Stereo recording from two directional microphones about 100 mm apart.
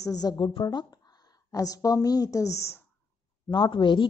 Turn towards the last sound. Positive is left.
turn(degrees=55)  # may be behind; listen again after turning